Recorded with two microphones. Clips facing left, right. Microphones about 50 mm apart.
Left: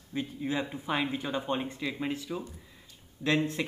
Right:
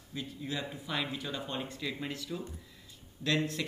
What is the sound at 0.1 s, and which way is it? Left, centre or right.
Speech, left.